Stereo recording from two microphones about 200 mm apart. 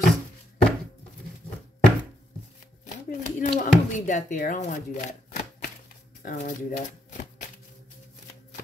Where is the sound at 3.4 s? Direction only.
40° left (ahead or behind).